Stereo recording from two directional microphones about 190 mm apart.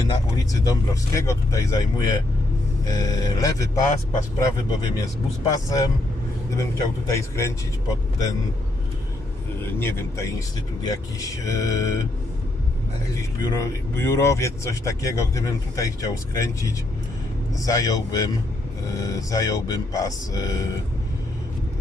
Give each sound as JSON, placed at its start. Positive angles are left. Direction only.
{"t": 0.1, "sound": "speech", "side_deg": 20}
{"t": 9.7, "sound": "speech", "side_deg": 10}
{"t": 13.4, "sound": "speech", "side_deg": 15}